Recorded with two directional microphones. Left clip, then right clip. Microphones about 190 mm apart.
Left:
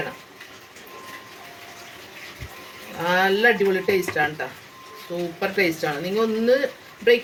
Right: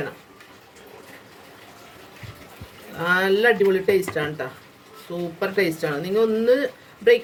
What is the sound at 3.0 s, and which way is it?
A woman's voice, 65° right (ahead or behind).